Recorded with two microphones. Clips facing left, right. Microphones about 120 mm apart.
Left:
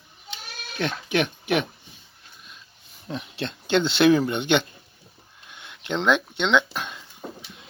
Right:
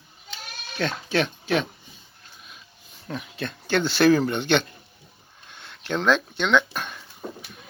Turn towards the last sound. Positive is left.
turn(degrees=15)  # may be behind; listen again after turning